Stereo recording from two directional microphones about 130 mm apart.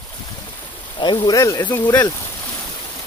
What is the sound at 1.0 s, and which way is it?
Speech, 35° left (ahead or behind).